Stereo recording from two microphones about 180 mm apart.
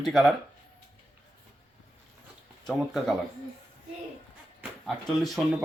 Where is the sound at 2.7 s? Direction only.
Centre (ahead or behind).